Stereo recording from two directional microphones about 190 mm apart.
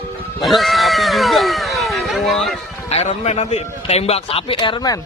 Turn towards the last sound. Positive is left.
turn(degrees=20)  # may be behind; listen again after turning